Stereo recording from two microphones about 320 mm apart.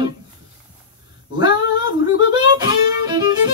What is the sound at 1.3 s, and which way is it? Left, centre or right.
Music, centre.